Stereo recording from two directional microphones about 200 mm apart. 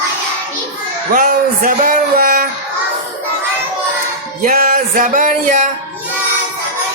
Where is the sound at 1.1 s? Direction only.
40° right (ahead or behind).